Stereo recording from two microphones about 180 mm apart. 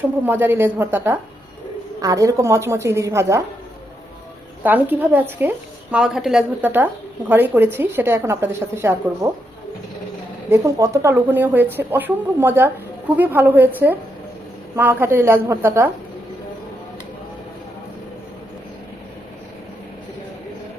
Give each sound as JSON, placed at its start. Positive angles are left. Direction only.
{"t": 0.3, "sound": "a woman's voice", "side_deg": -10}
{"t": 4.6, "sound": "a woman's voice", "side_deg": -10}
{"t": 10.5, "sound": "a woman's voice", "side_deg": -15}